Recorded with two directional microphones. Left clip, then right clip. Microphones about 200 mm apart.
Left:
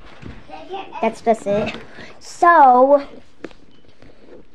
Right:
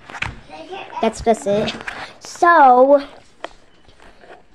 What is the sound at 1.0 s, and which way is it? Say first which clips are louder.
Speech: right 1 dB; 10° right (ahead or behind).